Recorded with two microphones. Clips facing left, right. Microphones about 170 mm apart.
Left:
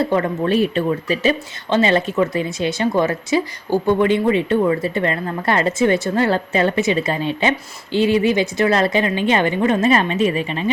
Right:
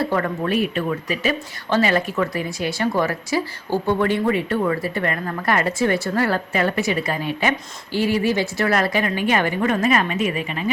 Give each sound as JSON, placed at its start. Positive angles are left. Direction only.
{"t": 0.0, "sound": "speech", "side_deg": 25}